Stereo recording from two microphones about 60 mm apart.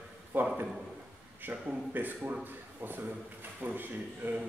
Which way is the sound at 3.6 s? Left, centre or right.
Right.